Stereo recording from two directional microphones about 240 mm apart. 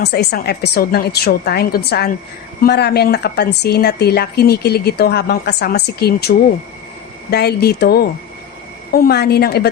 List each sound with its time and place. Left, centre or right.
0.0 s speech: left